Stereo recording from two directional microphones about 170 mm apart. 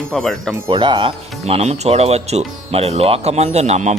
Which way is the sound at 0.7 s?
25° right (ahead or behind).